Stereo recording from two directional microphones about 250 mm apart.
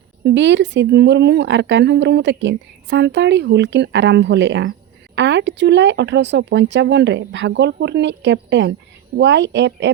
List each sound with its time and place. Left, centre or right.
0.3 s speech: right